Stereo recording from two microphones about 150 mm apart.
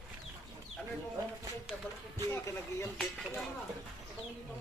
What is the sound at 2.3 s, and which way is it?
Speech, 20° left (ahead or behind).